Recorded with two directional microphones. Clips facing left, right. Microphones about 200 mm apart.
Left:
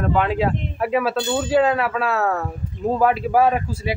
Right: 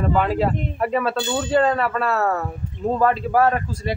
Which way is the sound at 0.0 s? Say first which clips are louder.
Even; centre (ahead or behind).